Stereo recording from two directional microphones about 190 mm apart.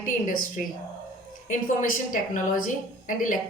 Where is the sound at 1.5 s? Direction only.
45° left (ahead or behind).